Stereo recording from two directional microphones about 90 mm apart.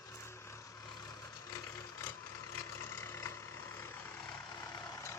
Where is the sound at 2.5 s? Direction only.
30° left (ahead or behind).